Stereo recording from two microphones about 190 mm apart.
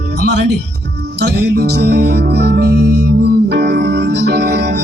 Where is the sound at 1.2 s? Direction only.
60° right (ahead or behind).